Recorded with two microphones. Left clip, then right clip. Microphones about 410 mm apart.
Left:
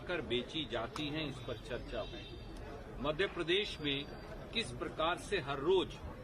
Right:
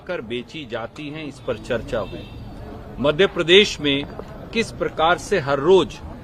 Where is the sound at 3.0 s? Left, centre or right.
Right.